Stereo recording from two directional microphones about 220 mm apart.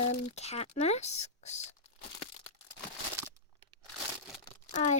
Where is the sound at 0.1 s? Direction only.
30° left (ahead or behind).